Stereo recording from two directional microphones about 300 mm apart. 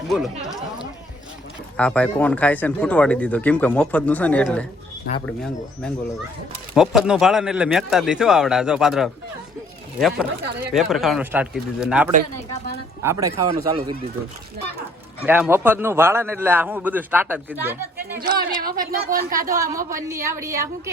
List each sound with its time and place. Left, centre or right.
0.4 s a man's voice: centre
15.3 s a man's voice: centre
18.2 s speech: right
19.5 s a man's voice: centre